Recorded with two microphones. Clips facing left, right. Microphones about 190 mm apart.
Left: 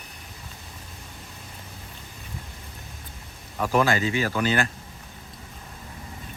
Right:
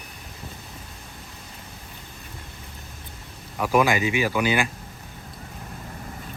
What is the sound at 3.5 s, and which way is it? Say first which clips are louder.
Speech: right 2 dB; 10° right (ahead or behind).